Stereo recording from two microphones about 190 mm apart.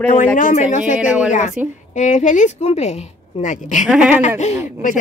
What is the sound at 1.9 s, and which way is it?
Speech, 40° left (ahead or behind).